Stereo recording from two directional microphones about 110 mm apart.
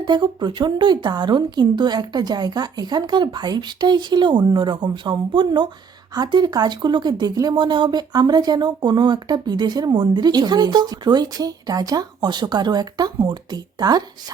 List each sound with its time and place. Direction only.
0.0 s speech: 40° right (ahead or behind)